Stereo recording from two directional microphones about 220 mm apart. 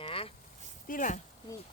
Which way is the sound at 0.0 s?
25° left (ahead or behind).